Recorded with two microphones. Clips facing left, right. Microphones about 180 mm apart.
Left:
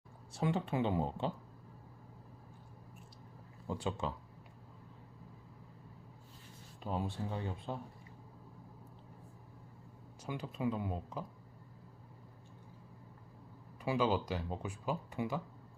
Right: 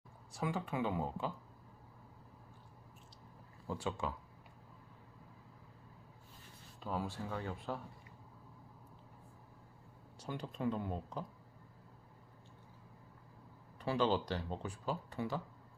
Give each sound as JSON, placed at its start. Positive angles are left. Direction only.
{"t": 0.3, "sound": "speech", "side_deg": 25}
{"t": 3.7, "sound": "speech", "side_deg": 20}
{"t": 6.8, "sound": "speech", "side_deg": 20}
{"t": 10.2, "sound": "speech", "side_deg": 5}
{"t": 13.8, "sound": "speech", "side_deg": 10}